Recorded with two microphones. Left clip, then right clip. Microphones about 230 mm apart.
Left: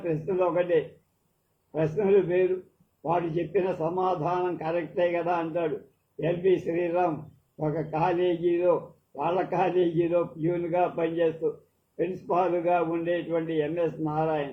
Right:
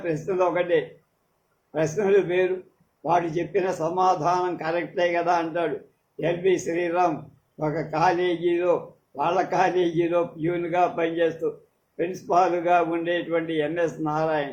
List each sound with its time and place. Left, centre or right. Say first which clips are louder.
0.0 s a man's voice: right 3 dB; right